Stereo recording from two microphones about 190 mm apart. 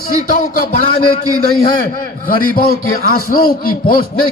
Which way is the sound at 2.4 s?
50° left (ahead or behind).